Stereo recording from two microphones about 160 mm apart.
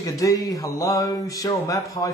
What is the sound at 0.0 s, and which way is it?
A man's voice, 20° left (ahead or behind).